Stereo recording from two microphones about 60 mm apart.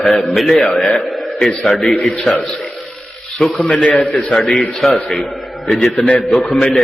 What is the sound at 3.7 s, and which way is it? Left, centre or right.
Speech, left.